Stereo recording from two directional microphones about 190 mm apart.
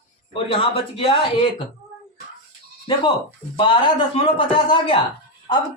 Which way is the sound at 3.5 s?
25° left (ahead or behind).